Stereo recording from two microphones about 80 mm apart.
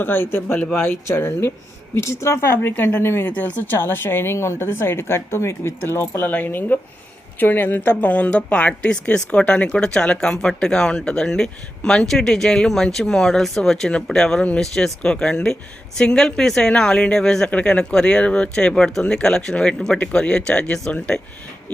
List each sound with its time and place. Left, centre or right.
0.0 s speech: left; by 20.9 s centre